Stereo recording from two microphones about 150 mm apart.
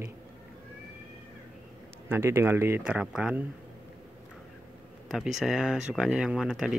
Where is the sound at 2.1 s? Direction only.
15° right (ahead or behind).